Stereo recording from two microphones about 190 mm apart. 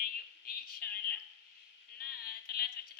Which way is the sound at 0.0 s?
50° left (ahead or behind).